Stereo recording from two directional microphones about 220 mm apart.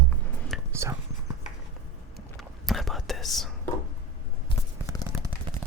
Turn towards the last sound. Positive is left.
turn(degrees=-10)  # may be behind; listen again after turning